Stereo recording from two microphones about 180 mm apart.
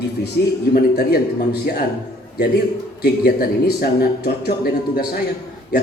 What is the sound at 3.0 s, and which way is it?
A man's voice, 60° left (ahead or behind).